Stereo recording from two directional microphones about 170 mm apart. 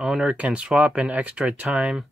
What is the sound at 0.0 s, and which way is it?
Speech, 5° right (ahead or behind).